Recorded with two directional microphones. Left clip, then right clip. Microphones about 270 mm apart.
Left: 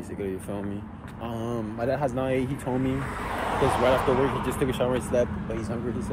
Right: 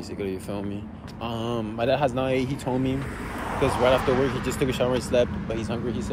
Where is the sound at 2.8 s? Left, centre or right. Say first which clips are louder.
Even; left.